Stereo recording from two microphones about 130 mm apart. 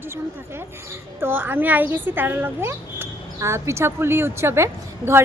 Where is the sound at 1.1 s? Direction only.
15° right (ahead or behind).